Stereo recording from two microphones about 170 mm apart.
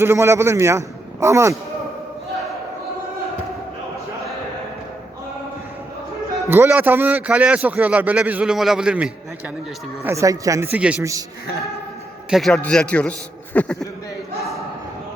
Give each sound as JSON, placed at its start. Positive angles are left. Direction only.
{"t": 0.0, "sound": "a man's voice", "side_deg": -15}
{"t": 6.5, "sound": "a man's voice", "side_deg": -15}
{"t": 10.0, "sound": "a man's voice", "side_deg": -15}
{"t": 12.3, "sound": "a man's voice", "side_deg": 0}